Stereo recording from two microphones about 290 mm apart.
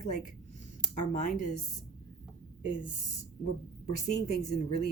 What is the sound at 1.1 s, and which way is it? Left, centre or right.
Speech, left.